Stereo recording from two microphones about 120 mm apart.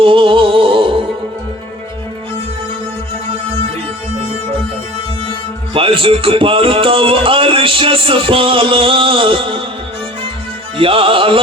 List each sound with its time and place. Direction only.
0.0 s music: 45° right (ahead or behind)
5.7 s music: 45° right (ahead or behind)
10.8 s music: 50° right (ahead or behind)